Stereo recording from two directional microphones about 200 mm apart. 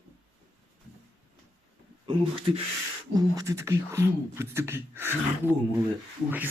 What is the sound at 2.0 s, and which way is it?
Speech, 25° right (ahead or behind).